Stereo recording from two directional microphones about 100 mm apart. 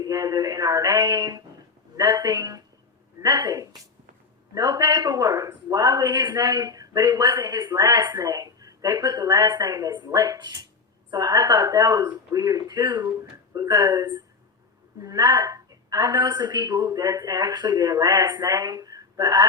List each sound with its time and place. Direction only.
0.0 s a woman's voice: 35° right (ahead or behind)
10.0 s a woman's voice: 45° right (ahead or behind)